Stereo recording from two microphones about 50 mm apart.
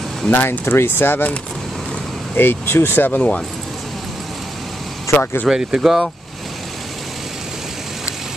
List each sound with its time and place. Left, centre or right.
0.3 s speech: left
2.3 s speech: left
5.1 s speech: left
5.5 s speech: centre